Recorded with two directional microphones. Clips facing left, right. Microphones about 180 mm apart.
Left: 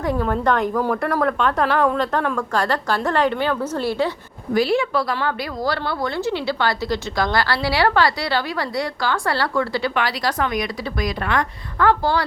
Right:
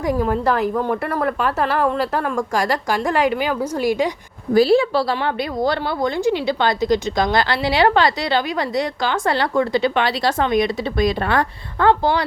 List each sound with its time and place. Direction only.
0.0 s a woman's voice: 10° right (ahead or behind)
4.5 s a woman's voice: 35° right (ahead or behind)